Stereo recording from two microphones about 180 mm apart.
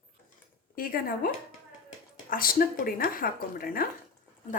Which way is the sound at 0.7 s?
50° left (ahead or behind).